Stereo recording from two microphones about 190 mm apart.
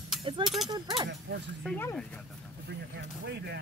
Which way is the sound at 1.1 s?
65° right (ahead or behind).